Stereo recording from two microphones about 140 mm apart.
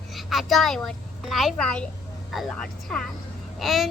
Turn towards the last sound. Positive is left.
turn(degrees=0)  # may be behind; listen again after turning